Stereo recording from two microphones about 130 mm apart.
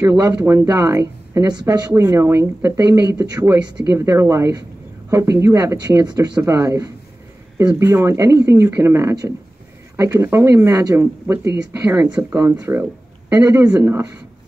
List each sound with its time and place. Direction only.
0.0 s speech: 30° right (ahead or behind)
0.3 s speech: 15° right (ahead or behind); by 1.9 s 30° right (ahead or behind)
2.0 s speech: 20° right (ahead or behind)